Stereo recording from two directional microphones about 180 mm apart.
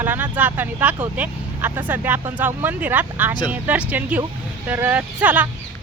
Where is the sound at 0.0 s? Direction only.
10° right (ahead or behind).